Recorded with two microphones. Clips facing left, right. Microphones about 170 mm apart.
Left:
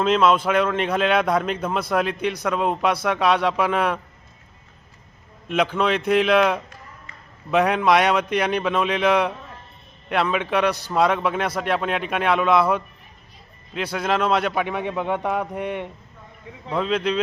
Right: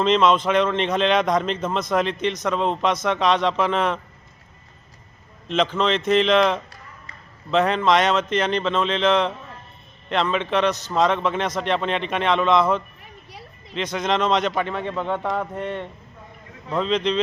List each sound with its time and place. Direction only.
0.0 s a man's voice: 5° left (ahead or behind)
5.5 s a man's voice: 10° left (ahead or behind)
13.0 s a sound: 75° right (ahead or behind)
13.7 s a man's voice: 5° left (ahead or behind)